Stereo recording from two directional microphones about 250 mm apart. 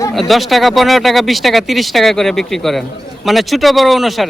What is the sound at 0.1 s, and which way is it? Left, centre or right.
Speech, centre.